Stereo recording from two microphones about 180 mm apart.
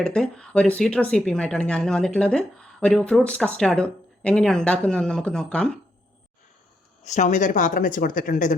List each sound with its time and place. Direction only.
0.0 s speech: 5° left (ahead or behind)
7.0 s speech: 40° left (ahead or behind)